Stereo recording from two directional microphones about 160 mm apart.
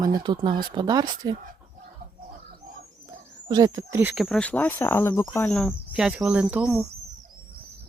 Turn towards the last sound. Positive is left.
turn(degrees=-5)  # may be behind; listen again after turning